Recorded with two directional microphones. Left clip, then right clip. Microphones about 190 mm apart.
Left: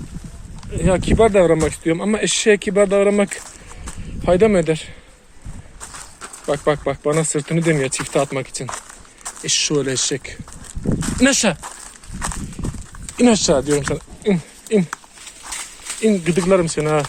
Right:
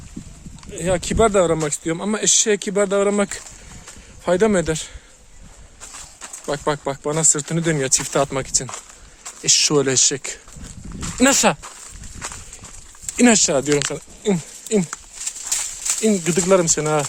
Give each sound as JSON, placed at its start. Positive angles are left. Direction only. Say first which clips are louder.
{"t": 0.7, "sound": "speech", "louder": "left 3 dB", "side_deg": -25}
{"t": 6.5, "sound": "speech", "louder": "left 4 dB", "side_deg": -25}
{"t": 13.1, "sound": "speech", "louder": "left 1 dB", "side_deg": -55}
{"t": 14.3, "sound": "speech", "louder": "left 2 dB", "side_deg": -30}
{"t": 16.0, "sound": "speech", "louder": "left 2 dB", "side_deg": -30}